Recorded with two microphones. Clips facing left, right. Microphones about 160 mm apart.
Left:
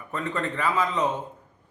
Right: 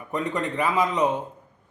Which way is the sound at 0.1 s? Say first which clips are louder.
Right 2 dB; 15° right (ahead or behind).